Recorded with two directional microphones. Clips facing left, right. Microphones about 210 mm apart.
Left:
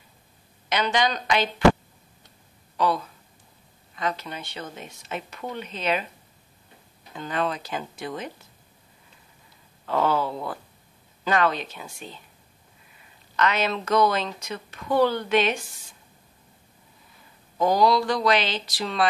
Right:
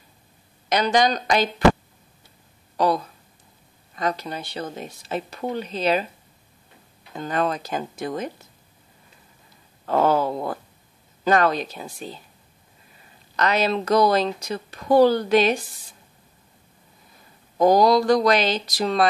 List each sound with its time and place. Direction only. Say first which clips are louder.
0.7 s speech: right 4 dB; 40° right (ahead or behind)
2.8 s a sound: right 3 dB; 40° right (ahead or behind)
3.9 s speech: right 4 dB; 40° right (ahead or behind)
7.2 s speech: right 3 dB; 45° right (ahead or behind)
9.8 s wail: right 4 dB; 45° right (ahead or behind)
11.2 s speech: right 4 dB; 40° right (ahead or behind)
13.4 s speech: right 3 dB; 35° right (ahead or behind)
17.6 s speech: right 4 dB; 40° right (ahead or behind)